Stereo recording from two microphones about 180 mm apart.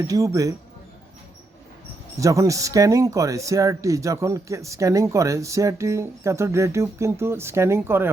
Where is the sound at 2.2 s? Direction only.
20° right (ahead or behind).